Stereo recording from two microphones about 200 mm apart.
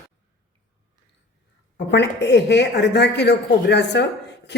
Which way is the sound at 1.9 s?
60° left (ahead or behind).